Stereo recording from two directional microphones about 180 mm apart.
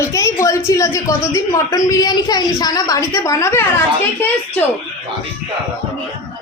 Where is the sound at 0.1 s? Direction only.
15° left (ahead or behind).